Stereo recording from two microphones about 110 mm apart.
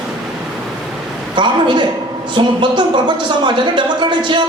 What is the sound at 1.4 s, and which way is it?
Speech, 45° right (ahead or behind).